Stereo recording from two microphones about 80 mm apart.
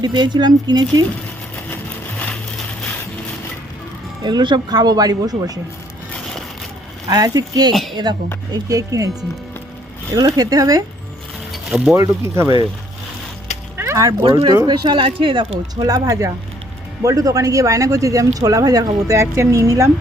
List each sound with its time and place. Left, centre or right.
0.0 s speech: right
4.2 s speech: right
7.1 s a man's voice: right
7.7 s a woman's voice: centre
8.6 s a man's voice: right
10.2 s a man's voice: right
11.5 s mechanisms: centre
11.9 s speech: right
13.7 s a sound: right
14.2 s speech: right
15.7 s a man's voice: right